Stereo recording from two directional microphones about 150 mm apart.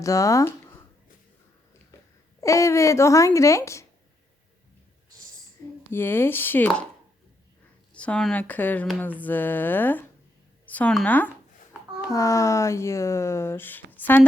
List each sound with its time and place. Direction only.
0.0 s speech: 20° left (ahead or behind)
2.4 s speech: 20° left (ahead or behind)
5.9 s speech: 15° left (ahead or behind)
7.9 s speech: 5° left (ahead or behind)